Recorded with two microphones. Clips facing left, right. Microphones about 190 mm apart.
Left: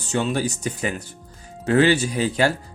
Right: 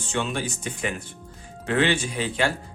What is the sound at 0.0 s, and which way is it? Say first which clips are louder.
Speech: left 5 dB; 40° left (ahead or behind).